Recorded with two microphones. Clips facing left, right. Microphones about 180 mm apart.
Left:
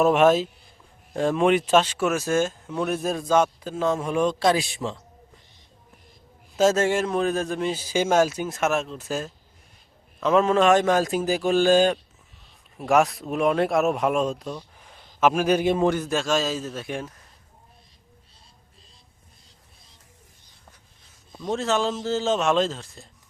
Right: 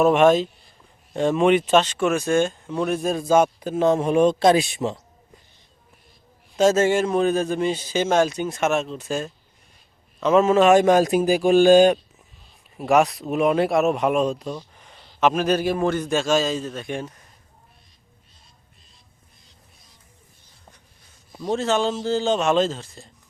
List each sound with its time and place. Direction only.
0.0 s speech: centre (ahead or behind)
3.2 s a man's voice: 10° right (ahead or behind)
6.6 s a man's voice: centre (ahead or behind); by 11.9 s 15° right (ahead or behind)
12.7 s speech: 5° right (ahead or behind); by 16.0 s 20° left (ahead or behind)
16.0 s speech: centre (ahead or behind)
21.3 s speech: centre (ahead or behind)